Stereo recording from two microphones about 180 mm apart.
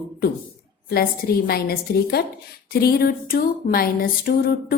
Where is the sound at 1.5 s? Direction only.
55° left (ahead or behind).